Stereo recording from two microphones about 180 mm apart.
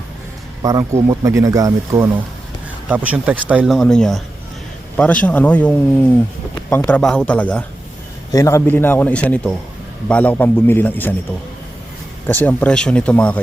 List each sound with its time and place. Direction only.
0.6 s a man's voice: 20° right (ahead or behind); by 7.6 s 5° left (ahead or behind)
8.3 s a man's voice: 20° left (ahead or behind)
12.3 s a man's voice: 10° left (ahead or behind)